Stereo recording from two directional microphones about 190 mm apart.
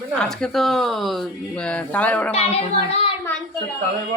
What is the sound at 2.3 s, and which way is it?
Speech, 35° left (ahead or behind).